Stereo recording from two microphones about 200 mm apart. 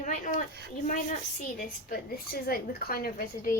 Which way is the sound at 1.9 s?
45° left (ahead or behind).